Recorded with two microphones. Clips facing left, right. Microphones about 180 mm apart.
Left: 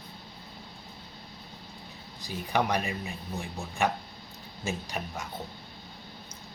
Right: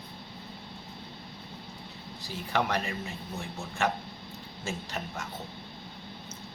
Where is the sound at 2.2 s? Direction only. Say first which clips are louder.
Left 2 dB; 15° left (ahead or behind).